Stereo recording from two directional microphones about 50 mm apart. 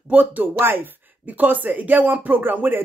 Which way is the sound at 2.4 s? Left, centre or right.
Right.